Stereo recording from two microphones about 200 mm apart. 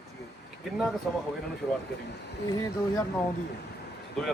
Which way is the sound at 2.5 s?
15° left (ahead or behind).